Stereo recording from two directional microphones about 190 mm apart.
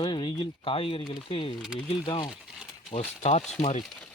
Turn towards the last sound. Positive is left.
turn(degrees=5)  # may be behind; listen again after turning